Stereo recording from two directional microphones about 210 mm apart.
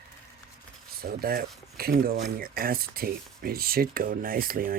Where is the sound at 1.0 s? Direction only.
45° right (ahead or behind).